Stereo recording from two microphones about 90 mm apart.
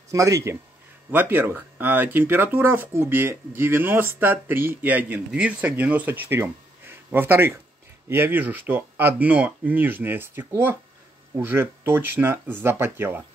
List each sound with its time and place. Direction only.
0.1 s speech: 35° right (ahead or behind)
1.1 s speech: 20° right (ahead or behind)